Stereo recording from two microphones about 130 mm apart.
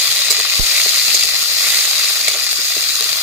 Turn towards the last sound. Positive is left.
turn(degrees=-10)  # may be behind; listen again after turning